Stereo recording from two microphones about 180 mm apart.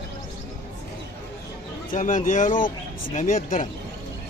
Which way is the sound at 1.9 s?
45° left (ahead or behind).